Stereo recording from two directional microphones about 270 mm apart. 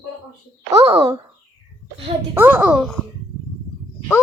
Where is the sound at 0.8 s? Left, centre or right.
Centre.